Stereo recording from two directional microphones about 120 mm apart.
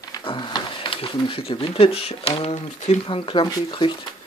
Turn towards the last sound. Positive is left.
turn(degrees=35)  # may be behind; listen again after turning